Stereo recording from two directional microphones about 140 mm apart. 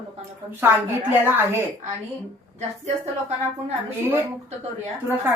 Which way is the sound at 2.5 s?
50° right (ahead or behind).